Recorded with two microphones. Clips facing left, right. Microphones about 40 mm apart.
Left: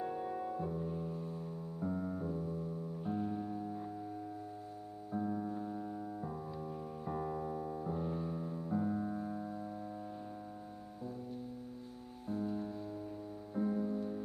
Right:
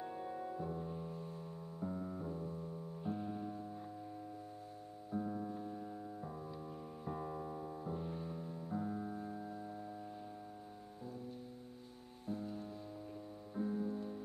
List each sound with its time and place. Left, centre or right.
0.0 s music: left
0.7 s music: centre
1.8 s music: left
3.0 s music: centre
5.1 s music: centre
9.5 s music: centre
12.4 s music: centre